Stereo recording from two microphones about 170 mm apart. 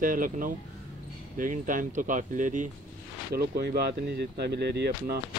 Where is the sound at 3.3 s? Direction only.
65° right (ahead or behind).